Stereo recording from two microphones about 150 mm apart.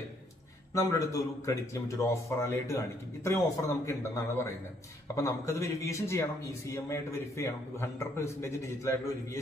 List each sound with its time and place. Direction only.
0.7 s a man's voice: 20° left (ahead or behind)